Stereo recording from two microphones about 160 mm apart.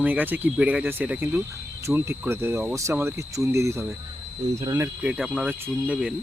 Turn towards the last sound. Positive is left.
turn(degrees=-5)  # may be behind; listen again after turning